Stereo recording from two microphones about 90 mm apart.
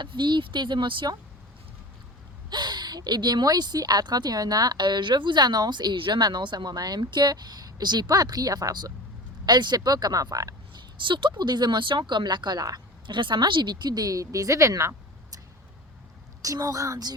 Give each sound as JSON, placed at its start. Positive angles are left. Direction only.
{"t": 0.0, "sound": "speech", "side_deg": -60}
{"t": 2.5, "sound": "a woman's voice", "side_deg": -55}
{"t": 10.8, "sound": "a woman's voice", "side_deg": -65}
{"t": 16.4, "sound": "a woman's voice", "side_deg": -40}